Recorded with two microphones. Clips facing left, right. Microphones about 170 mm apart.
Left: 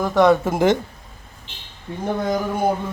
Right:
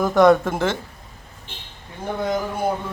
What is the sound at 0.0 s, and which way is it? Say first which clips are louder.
Speech: right 1 dB; centre (ahead or behind).